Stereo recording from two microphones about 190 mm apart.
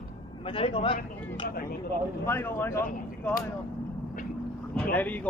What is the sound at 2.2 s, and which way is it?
Speech, 10° left (ahead or behind).